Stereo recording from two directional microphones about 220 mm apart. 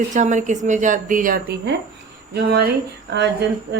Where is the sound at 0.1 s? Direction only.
35° right (ahead or behind); by 3.2 s 50° right (ahead or behind).